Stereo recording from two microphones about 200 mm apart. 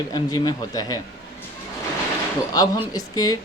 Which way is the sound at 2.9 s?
20° left (ahead or behind).